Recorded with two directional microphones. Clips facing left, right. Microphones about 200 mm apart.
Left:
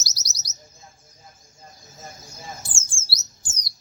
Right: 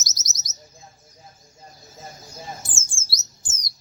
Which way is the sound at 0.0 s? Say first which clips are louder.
Even; 20° right (ahead or behind).